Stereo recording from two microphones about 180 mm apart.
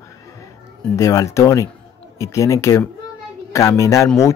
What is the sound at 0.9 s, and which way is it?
Speech, 15° left (ahead or behind).